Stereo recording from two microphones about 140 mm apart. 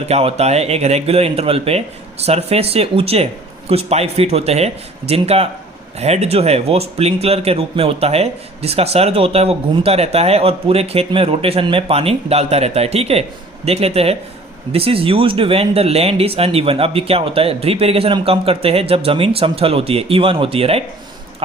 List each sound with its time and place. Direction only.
0.0 s speech: 50° right (ahead or behind)